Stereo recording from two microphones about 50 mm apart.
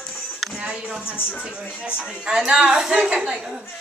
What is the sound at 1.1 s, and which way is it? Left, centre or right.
Speech, left.